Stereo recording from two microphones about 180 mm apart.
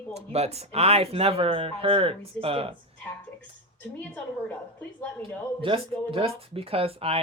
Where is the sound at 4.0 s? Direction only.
10° left (ahead or behind).